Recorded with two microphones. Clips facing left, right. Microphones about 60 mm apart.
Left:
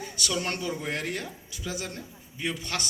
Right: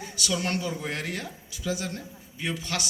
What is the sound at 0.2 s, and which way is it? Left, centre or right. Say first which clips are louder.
A man's voice: right 2 dB; left.